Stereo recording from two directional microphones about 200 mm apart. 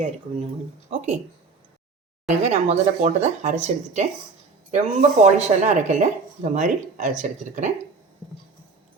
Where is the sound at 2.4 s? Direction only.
35° right (ahead or behind).